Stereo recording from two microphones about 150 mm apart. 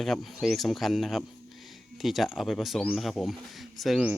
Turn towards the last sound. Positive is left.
turn(degrees=-5)  # may be behind; listen again after turning